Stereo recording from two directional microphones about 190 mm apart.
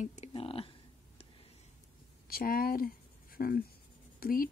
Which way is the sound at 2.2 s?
50° left (ahead or behind).